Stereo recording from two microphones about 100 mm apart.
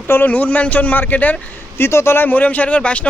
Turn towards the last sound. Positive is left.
turn(degrees=10)  # may be behind; listen again after turning